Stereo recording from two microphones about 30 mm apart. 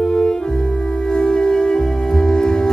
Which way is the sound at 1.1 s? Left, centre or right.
Left.